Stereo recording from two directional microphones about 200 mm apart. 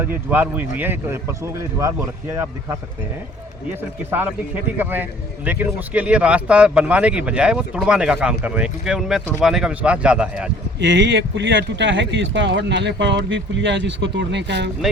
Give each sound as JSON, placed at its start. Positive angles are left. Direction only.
{"t": 0.0, "sound": "a man's voice", "side_deg": -10}
{"t": 3.7, "sound": "a man's voice", "side_deg": -10}
{"t": 10.8, "sound": "speech", "side_deg": -60}